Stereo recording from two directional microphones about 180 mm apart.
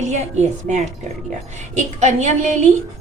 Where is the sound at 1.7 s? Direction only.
40° right (ahead or behind).